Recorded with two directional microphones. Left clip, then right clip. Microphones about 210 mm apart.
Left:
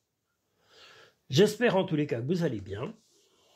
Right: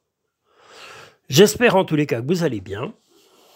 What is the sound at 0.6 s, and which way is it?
Gasp, 50° right (ahead or behind).